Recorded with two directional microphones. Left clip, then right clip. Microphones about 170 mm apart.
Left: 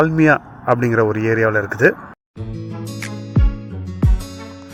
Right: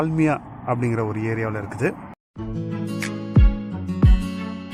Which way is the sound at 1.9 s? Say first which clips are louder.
Left 2 dB; centre (ahead or behind).